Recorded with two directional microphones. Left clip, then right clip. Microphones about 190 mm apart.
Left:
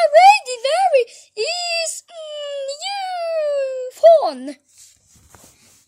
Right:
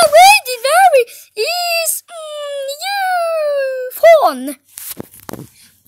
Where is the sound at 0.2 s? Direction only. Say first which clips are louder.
Right 3 dB; 35° right (ahead or behind).